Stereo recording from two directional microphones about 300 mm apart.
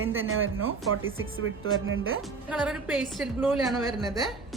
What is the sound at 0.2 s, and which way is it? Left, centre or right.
Speech, right.